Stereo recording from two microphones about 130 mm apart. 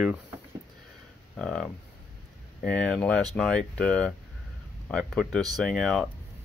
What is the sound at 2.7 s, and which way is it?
Speech, 10° left (ahead or behind).